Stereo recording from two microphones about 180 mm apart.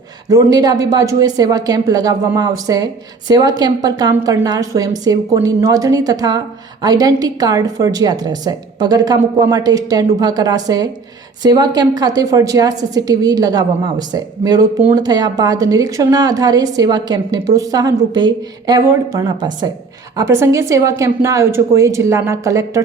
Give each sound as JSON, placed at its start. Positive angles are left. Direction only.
{"t": 0.3, "sound": "a woman's voice", "side_deg": -20}